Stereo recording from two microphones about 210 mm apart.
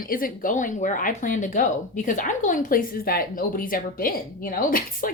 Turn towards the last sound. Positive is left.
turn(degrees=40)  # may be behind; listen again after turning